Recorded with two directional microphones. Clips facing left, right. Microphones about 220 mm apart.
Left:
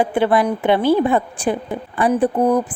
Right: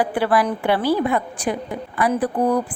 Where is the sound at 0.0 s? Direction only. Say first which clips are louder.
Left 3 dB; 25° left (ahead or behind).